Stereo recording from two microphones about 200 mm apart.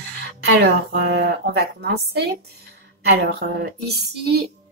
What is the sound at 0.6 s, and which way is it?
Speech, 50° right (ahead or behind).